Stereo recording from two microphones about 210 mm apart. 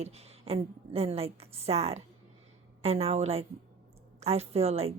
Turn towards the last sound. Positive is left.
turn(degrees=-30)  # may be behind; listen again after turning